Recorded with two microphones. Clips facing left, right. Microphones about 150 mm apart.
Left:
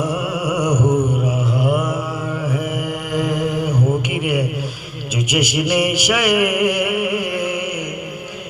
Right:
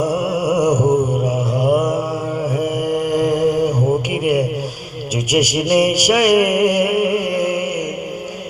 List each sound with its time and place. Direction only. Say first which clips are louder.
0.0 s music: right 4 dB; 40° right (ahead or behind)
1.1 s mantra: right 2 dB; 40° right (ahead or behind)
4.1 s a sound: right 4 dB; 40° right (ahead or behind)
5.3 s mantra: right 4 dB; 40° right (ahead or behind)